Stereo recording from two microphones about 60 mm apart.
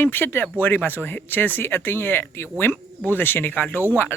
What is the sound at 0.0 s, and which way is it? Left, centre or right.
Speech, left.